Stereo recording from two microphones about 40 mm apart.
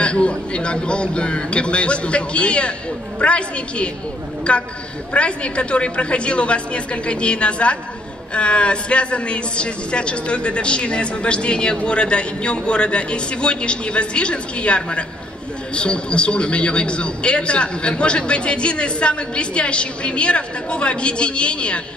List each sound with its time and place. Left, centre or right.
0.0 s a man's voice: left